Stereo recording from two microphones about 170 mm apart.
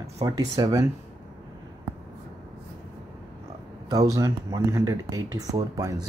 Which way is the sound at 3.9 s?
20° right (ahead or behind).